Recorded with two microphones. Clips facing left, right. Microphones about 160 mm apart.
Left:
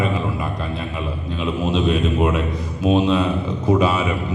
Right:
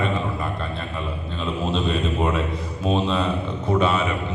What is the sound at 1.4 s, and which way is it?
A man's voice, 5° left (ahead or behind).